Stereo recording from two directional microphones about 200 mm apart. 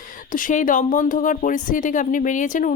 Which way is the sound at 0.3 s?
40° left (ahead or behind).